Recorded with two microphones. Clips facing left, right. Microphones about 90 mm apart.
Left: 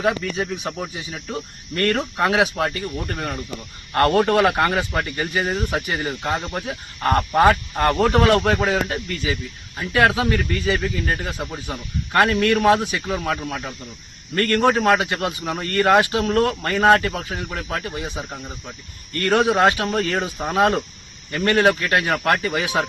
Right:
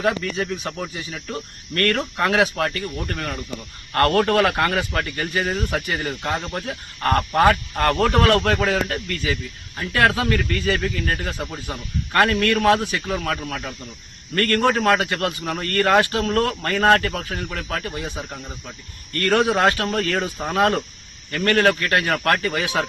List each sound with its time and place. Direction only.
0.0 s a man's voice: 15° left (ahead or behind)